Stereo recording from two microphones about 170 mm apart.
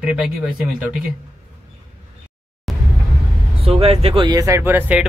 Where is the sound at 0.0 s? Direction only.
5° right (ahead or behind).